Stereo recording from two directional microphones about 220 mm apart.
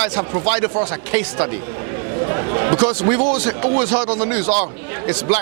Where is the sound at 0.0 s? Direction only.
15° right (ahead or behind).